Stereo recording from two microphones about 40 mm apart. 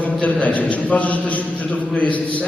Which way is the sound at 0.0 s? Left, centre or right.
Left.